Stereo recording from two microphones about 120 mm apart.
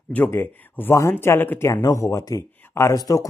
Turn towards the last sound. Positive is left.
turn(degrees=30)  # may be behind; listen again after turning